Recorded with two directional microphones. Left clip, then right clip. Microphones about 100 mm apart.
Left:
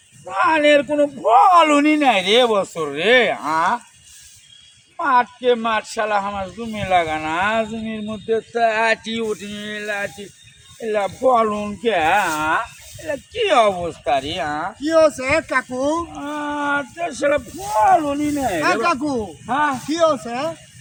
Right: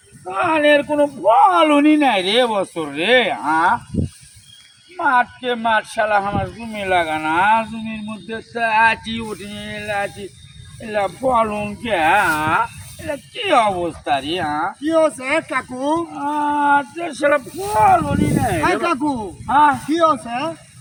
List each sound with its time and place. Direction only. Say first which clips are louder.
0.3 s a man's voice: even; 50° left (ahead or behind)
5.0 s a man's voice: left 1 dB; 55° left (ahead or behind); by 12.6 s 30° left (ahead or behind)
13.1 s a man's voice: even; 40° left (ahead or behind)
17.6 s speech: right 3 dB; 30° right (ahead or behind)
18.6 s a man's voice: left 1 dB; 50° left (ahead or behind)